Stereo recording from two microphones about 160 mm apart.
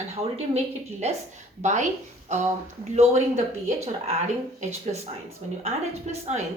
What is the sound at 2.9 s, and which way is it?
A woman's voice, 45° right (ahead or behind).